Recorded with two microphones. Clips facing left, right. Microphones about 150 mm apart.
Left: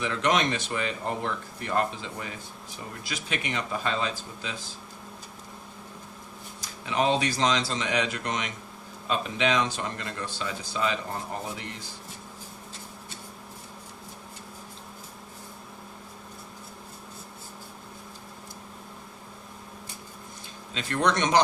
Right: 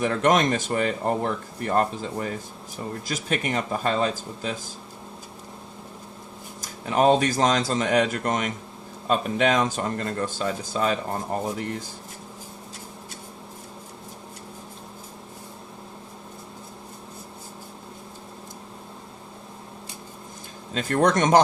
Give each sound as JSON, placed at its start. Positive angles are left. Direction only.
{"t": 0.0, "sound": "speech", "side_deg": -45}
{"t": 6.6, "sound": "speech", "side_deg": -45}
{"t": 20.7, "sound": "speech", "side_deg": -45}